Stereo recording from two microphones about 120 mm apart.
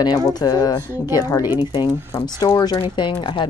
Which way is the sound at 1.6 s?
45° left (ahead or behind).